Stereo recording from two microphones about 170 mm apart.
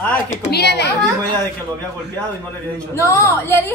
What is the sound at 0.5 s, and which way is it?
Speech, 75° left (ahead or behind).